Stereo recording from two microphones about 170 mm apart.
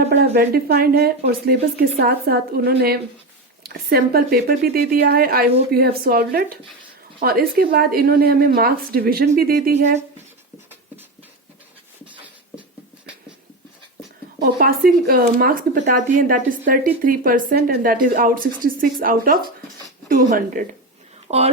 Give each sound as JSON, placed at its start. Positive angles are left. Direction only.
{"t": 0.0, "sound": "speech", "side_deg": -85}
{"t": 0.3, "sound": "speech", "side_deg": -65}
{"t": 9.7, "sound": "speech", "side_deg": -40}
{"t": 14.3, "sound": "speech", "side_deg": -60}
{"t": 21.2, "sound": "speech", "side_deg": -40}